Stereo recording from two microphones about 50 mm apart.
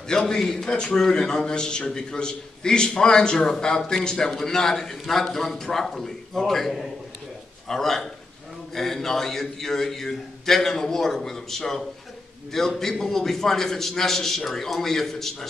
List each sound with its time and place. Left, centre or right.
0.1 s a man's voice: centre